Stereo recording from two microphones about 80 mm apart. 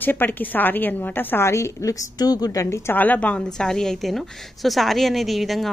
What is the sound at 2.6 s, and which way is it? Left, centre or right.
A woman's voice, left.